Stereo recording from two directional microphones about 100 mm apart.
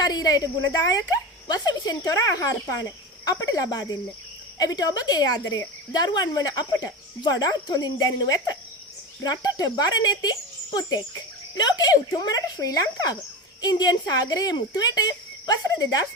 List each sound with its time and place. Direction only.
0.0 s a woman's voice: 40° left (ahead or behind)